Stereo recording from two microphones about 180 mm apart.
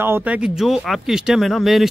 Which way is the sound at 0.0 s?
10° right (ahead or behind).